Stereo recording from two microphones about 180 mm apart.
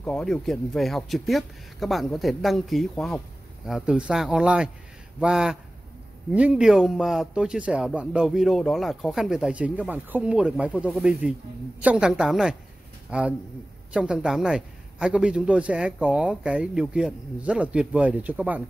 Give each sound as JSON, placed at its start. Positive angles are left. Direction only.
{"t": 0.0, "sound": "a man's voice", "side_deg": 5}